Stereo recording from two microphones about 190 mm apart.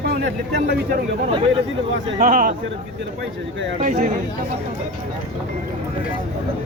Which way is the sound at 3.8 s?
40° right (ahead or behind).